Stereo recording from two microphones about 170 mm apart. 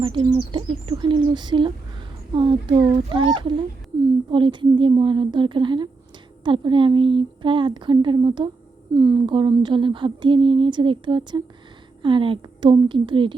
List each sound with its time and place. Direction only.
0.0 s speech: 30° right (ahead or behind)